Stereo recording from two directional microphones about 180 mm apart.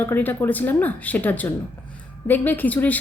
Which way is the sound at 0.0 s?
10° left (ahead or behind).